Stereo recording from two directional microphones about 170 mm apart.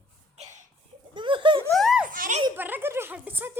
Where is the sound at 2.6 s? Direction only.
10° right (ahead or behind).